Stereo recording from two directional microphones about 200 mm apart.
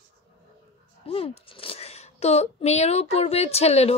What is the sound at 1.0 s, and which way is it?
Speech, 30° left (ahead or behind).